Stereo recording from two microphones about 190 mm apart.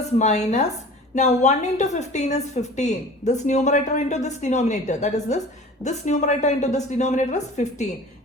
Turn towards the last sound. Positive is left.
turn(degrees=40)  # may be behind; listen again after turning